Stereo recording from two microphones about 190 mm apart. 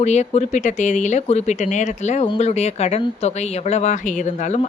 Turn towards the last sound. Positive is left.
turn(degrees=35)  # may be behind; listen again after turning